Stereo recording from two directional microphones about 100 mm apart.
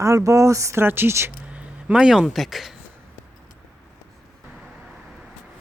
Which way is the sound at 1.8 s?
10° right (ahead or behind).